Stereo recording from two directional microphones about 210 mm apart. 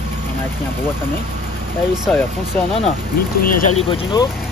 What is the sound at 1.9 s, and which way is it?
Speech, 5° right (ahead or behind).